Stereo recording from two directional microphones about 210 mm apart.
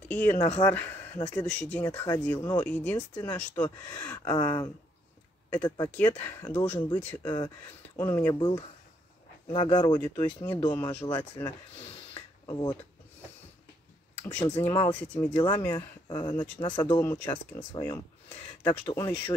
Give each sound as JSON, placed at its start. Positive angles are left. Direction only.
{"t": 0.1, "sound": "speech", "side_deg": 10}
{"t": 9.5, "sound": "speech", "side_deg": 25}
{"t": 12.1, "sound": "a sound", "side_deg": 20}
{"t": 14.6, "sound": "speech", "side_deg": 10}